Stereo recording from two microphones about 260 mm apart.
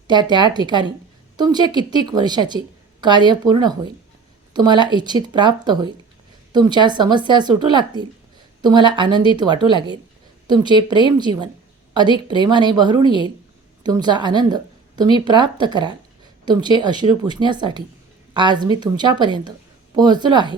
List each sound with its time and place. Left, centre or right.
0.1 s a woman's voice: centre